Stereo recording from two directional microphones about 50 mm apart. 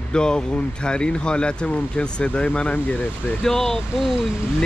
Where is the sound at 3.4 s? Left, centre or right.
Centre.